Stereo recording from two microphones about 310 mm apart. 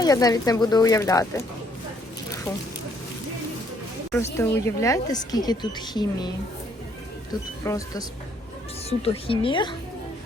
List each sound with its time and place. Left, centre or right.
0.0 s a woman's voice: centre
4.4 s a woman's voice: centre
7.6 s a woman's voice: centre